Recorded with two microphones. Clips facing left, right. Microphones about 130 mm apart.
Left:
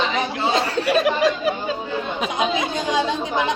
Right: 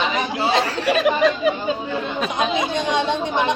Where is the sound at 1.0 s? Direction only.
Centre (ahead or behind).